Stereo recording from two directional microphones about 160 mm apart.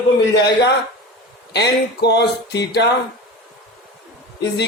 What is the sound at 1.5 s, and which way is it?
Speech, 90° left.